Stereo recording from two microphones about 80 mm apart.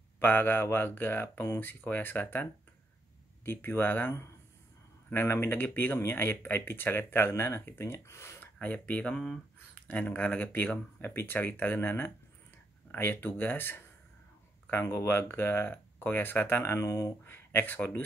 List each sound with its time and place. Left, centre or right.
0.2 s speech: left
5.1 s speech: left
8.5 s speech: centre